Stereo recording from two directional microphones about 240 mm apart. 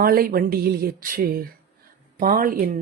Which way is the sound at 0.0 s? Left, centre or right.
Right.